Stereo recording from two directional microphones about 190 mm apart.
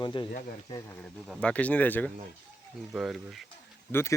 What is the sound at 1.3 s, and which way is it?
Speech, 5° left (ahead or behind).